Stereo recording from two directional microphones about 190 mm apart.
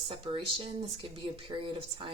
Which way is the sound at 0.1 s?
25° right (ahead or behind).